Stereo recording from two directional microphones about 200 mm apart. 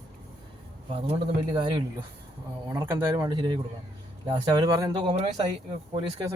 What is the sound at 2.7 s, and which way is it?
Speech, 10° right (ahead or behind).